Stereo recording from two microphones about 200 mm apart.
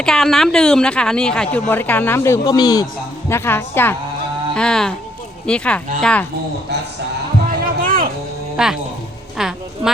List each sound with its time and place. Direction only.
0.0 s a woman's voice: centre (ahead or behind)
7.6 s music: 45° right (ahead or behind)
8.5 s speech: 5° right (ahead or behind)
9.4 s a sound: centre (ahead or behind)